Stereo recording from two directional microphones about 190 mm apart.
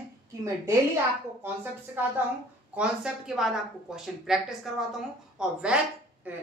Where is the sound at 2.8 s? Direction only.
5° right (ahead or behind).